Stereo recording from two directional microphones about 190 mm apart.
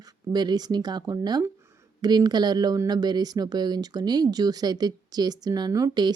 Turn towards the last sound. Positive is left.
turn(degrees=-20)  # may be behind; listen again after turning